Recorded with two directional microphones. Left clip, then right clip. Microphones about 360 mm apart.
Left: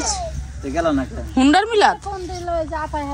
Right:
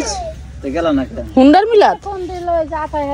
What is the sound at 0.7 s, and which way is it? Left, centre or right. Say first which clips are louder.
Speech: right 4 dB; centre.